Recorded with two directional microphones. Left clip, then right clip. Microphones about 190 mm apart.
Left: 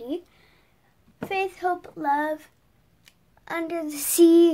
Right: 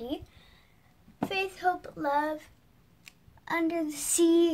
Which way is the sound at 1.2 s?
25° left (ahead or behind).